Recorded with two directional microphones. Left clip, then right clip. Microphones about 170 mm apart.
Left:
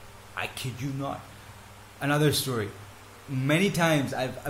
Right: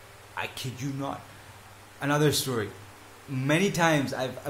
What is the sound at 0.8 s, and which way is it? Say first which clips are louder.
Speech: even; 20° right (ahead or behind).